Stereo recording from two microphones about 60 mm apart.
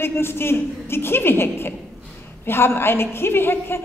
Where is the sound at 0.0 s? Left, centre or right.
Left.